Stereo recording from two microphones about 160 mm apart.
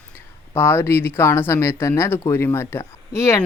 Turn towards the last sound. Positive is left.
turn(degrees=15)  # may be behind; listen again after turning